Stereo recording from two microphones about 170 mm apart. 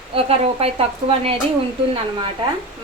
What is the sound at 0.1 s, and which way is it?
A woman's voice, 35° right (ahead or behind).